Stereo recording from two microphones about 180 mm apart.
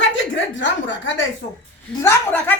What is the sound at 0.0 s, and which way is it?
A woman's voice, 90° left.